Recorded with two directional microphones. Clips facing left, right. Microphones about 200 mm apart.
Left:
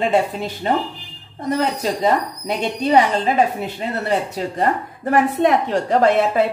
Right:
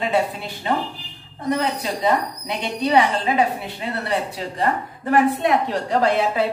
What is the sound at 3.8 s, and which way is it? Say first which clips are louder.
A woman's voice: left 3 dB; 45° left (ahead or behind).